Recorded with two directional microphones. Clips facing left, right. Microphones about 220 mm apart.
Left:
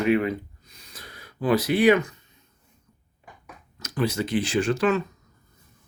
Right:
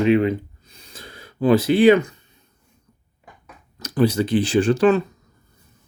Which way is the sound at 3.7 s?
35° right (ahead or behind).